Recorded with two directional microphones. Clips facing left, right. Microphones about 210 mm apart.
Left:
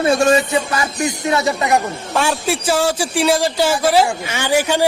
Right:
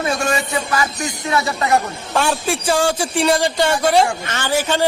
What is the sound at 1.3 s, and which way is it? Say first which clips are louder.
Speech: even; 20° left (ahead or behind).